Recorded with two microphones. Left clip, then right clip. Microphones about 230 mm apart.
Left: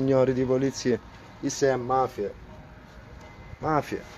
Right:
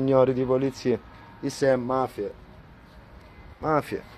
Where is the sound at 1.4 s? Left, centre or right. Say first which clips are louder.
Right 2 dB; right.